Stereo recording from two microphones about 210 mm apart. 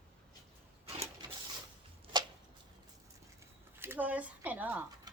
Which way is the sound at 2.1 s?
20° right (ahead or behind).